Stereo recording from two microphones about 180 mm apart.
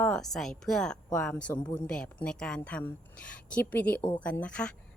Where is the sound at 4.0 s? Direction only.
25° left (ahead or behind).